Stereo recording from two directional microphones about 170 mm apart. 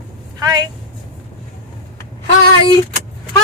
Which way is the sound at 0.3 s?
25° right (ahead or behind).